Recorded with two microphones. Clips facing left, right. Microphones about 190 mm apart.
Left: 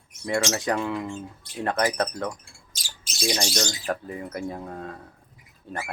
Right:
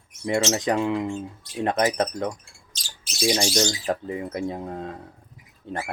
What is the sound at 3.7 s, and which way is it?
Speech, 20° right (ahead or behind).